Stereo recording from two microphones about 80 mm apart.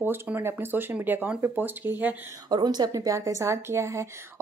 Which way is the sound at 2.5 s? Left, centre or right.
Right.